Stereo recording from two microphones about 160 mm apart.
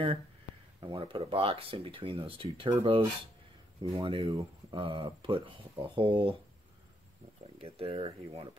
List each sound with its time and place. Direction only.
0.7 s speech: 30° right (ahead or behind)
7.6 s speech: 35° right (ahead or behind)